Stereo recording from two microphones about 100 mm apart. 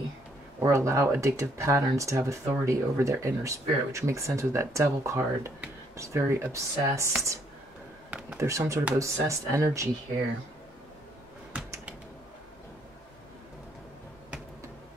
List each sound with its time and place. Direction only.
0.6 s speech: 30° right (ahead or behind)
8.4 s speech: 30° right (ahead or behind)